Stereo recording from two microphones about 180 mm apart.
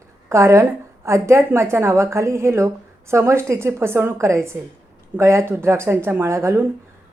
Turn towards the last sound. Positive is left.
turn(degrees=-15)  # may be behind; listen again after turning